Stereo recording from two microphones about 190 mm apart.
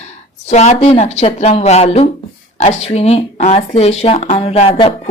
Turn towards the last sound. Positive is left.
turn(degrees=35)  # may be behind; listen again after turning